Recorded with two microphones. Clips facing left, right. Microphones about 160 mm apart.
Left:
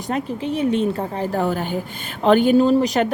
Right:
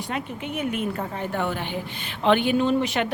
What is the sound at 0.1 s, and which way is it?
Speech, 30° left (ahead or behind).